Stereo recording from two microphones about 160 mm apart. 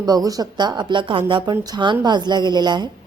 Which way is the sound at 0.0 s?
25° right (ahead or behind).